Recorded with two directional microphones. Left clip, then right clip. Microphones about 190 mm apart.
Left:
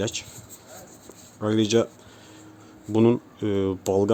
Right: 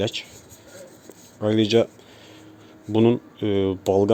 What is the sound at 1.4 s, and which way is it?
Speech, centre (ahead or behind).